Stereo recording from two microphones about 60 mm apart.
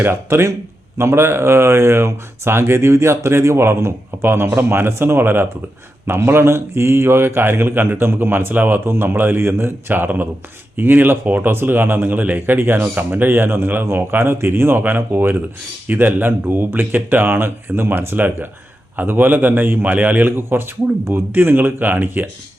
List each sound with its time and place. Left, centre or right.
0.0 s a man's voice: right
20.3 s a man's voice: right